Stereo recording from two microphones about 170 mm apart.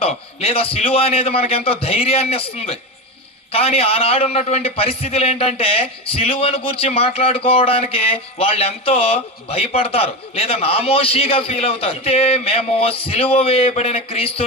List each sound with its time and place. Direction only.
0.0 s a man's voice: 35° left (ahead or behind)